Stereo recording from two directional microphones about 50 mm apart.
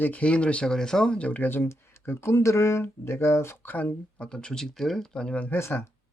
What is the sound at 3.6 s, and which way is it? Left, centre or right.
Speech, left.